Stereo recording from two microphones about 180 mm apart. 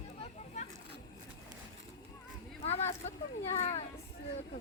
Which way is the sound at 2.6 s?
35° left (ahead or behind).